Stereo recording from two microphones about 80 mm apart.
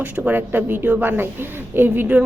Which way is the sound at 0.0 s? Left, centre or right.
Right.